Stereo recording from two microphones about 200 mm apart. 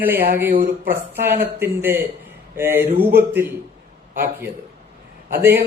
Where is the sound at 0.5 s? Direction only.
45° right (ahead or behind).